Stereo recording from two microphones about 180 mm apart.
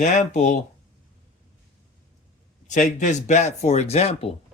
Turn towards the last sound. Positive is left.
turn(degrees=35)  # may be behind; listen again after turning